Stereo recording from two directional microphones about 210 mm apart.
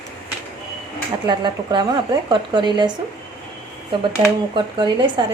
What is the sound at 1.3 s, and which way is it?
Speech, 20° right (ahead or behind).